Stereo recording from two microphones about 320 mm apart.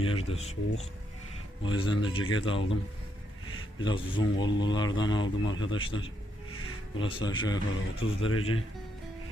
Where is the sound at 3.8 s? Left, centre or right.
Centre.